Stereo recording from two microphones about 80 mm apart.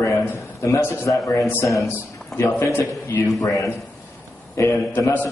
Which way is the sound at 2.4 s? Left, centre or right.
Left.